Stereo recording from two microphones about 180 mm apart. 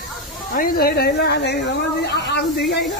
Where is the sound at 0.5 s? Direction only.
55° left (ahead or behind).